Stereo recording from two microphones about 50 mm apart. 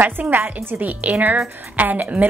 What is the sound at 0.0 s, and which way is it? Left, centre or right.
Speech, right.